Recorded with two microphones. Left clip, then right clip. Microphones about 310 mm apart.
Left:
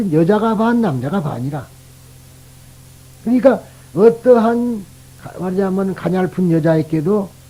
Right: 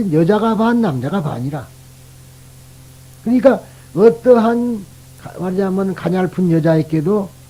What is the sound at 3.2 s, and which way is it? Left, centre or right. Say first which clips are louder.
Speech: even; left.